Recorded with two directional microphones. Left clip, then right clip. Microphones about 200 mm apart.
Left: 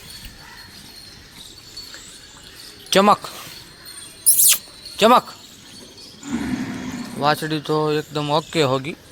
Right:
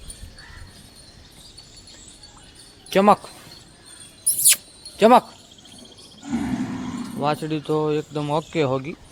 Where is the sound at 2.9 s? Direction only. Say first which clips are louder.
Left 2 dB; centre (ahead or behind).